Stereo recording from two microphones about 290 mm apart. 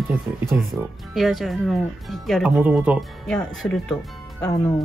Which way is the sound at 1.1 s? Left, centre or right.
Centre.